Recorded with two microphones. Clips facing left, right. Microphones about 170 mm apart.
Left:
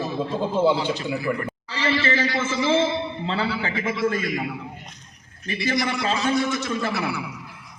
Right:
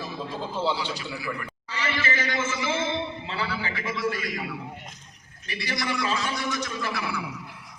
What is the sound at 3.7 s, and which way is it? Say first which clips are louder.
Speech: left 6 dB; 25° left (ahead or behind).